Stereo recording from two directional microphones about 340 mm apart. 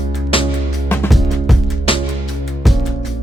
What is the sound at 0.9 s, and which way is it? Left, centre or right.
Music, centre.